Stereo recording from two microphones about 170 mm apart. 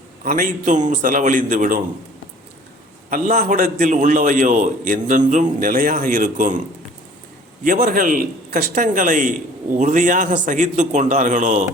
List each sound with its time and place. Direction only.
0.3 s a man's voice: 50° right (ahead or behind)
3.1 s a man's voice: 55° right (ahead or behind)
7.6 s a man's voice: 55° right (ahead or behind)